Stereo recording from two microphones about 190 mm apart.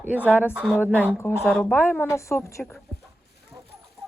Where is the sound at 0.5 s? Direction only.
Centre (ahead or behind).